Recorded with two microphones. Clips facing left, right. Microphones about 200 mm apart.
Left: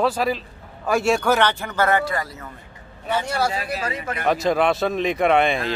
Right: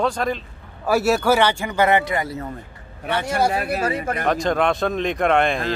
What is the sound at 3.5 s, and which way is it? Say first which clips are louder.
Speech: right 4 dB; 55° right (ahead or behind).